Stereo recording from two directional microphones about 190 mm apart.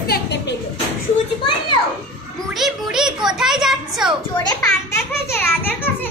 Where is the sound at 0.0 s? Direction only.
60° left (ahead or behind).